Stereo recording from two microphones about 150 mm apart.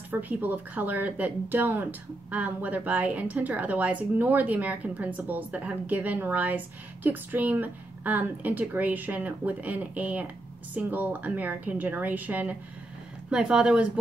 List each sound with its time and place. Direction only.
0.1 s speech: 10° right (ahead or behind)